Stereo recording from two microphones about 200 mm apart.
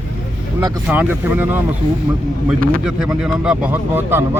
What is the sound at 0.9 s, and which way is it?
Speech, 10° right (ahead or behind).